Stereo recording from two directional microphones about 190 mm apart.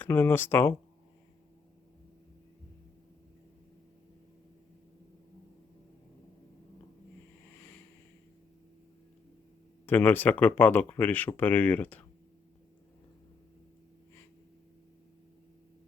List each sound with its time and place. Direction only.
0.0 s speech: 10° left (ahead or behind)
9.8 s speech: 10° left (ahead or behind)